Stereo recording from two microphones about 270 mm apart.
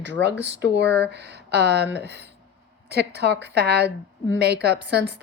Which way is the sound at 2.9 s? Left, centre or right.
Right.